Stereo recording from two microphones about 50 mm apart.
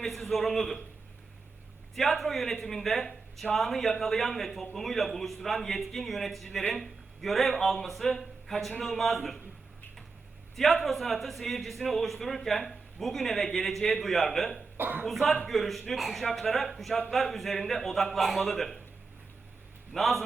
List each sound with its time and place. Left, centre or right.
0.0 s a man's voice: centre
2.0 s a man's voice: centre
10.5 s a man's voice: centre
14.8 s speech: right
15.0 s a man's voice: centre
19.9 s a man's voice: centre